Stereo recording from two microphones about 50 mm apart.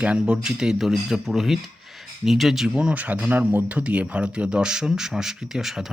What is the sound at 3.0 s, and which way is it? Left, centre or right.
Speech, right.